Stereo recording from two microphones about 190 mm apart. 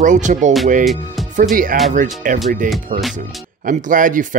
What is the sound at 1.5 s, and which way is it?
Speech, 45° right (ahead or behind).